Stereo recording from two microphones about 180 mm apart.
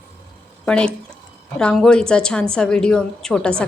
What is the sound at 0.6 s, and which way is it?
A woman's voice, 5° left (ahead or behind).